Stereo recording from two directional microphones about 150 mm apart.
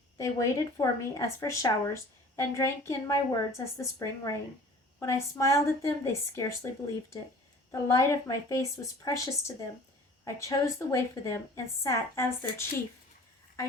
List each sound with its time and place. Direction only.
0.2 s speech: 20° left (ahead or behind)
7.7 s speech: 20° left (ahead or behind)